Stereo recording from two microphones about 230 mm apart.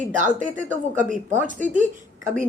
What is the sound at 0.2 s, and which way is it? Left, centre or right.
Speech, right.